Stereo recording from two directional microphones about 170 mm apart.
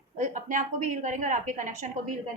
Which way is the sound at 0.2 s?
50° right (ahead or behind).